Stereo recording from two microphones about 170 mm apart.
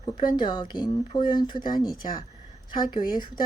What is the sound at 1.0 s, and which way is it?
Speech, 50° left (ahead or behind).